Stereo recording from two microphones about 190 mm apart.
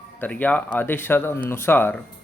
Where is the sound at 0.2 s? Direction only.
10° left (ahead or behind).